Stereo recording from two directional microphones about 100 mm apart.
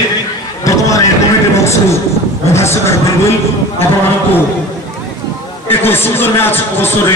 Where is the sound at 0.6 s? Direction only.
35° left (ahead or behind).